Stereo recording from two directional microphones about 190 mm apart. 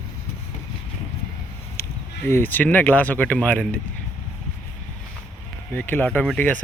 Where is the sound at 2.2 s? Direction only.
10° left (ahead or behind).